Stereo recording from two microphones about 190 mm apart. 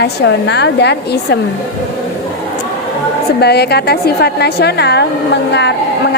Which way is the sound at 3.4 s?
60° left (ahead or behind).